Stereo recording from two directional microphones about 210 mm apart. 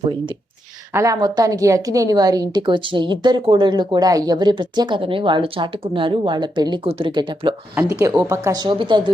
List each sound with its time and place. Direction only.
0.9 s a woman's voice: 15° right (ahead or behind)
8.0 s speech: 10° right (ahead or behind)